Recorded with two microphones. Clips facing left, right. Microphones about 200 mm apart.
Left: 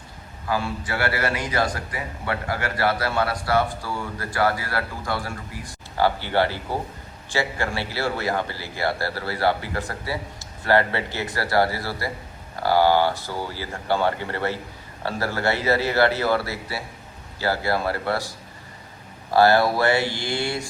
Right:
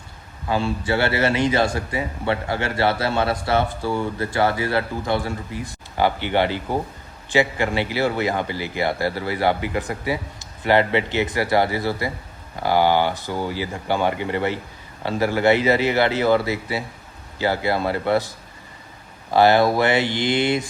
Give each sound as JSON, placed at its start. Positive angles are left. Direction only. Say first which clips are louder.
{"t": 0.4, "sound": "a man's voice", "louder": "right 4 dB", "side_deg": -25}
{"t": 19.3, "sound": "a man's voice", "louder": "right 2 dB", "side_deg": -20}